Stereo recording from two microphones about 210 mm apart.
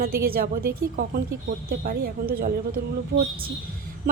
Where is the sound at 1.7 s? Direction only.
45° right (ahead or behind).